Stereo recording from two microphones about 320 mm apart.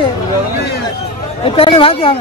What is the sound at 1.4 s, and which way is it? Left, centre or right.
Speech, centre.